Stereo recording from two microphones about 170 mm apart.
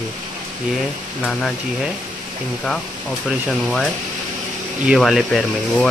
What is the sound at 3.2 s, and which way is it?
Speech, 5° right (ahead or behind).